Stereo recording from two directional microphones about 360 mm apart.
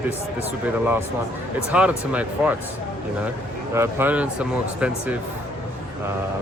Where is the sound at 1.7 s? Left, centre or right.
Centre.